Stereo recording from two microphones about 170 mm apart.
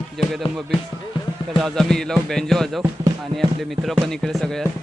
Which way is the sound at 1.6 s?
5° left (ahead or behind).